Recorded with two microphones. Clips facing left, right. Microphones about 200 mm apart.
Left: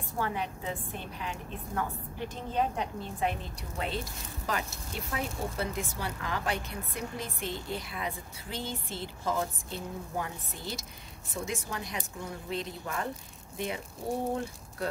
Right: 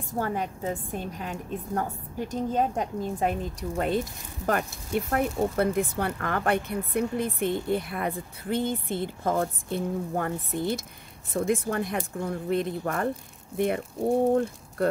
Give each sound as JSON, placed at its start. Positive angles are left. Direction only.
{"t": 0.2, "sound": "a woman's voice", "side_deg": -45}